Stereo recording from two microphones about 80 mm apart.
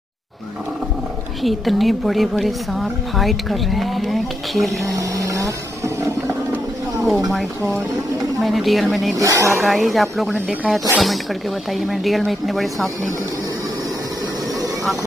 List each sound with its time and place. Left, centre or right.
1.4 s a woman's voice: centre
4.9 s a sound: right
8.4 s a woman's voice: centre
9.1 s speech: right
9.6 s a woman's voice: centre